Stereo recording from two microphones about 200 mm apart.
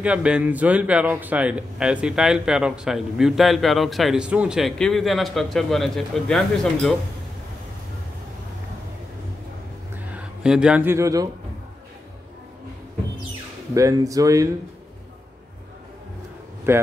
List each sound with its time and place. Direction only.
0.0 s speech: 5° right (ahead or behind)
10.1 s speech: 5° right (ahead or behind)
13.7 s speech: 15° right (ahead or behind)
16.7 s speech: 10° right (ahead or behind)